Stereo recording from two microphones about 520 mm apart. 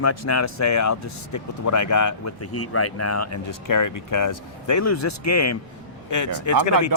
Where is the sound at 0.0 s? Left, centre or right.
Left.